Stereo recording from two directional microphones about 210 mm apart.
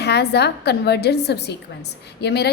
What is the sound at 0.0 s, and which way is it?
A woman's voice, 50° left (ahead or behind).